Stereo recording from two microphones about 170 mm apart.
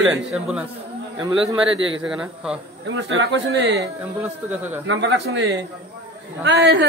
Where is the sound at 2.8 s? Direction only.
90° right.